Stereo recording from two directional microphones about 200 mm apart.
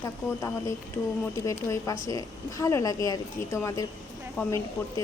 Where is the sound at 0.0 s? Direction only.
10° left (ahead or behind).